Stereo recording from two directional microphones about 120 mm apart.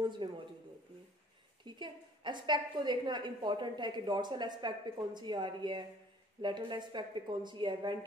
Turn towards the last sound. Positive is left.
turn(degrees=-40)  # may be behind; listen again after turning